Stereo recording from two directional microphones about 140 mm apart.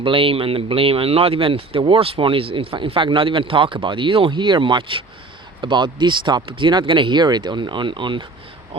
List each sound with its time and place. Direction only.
0.0 s speech: 40° right (ahead or behind)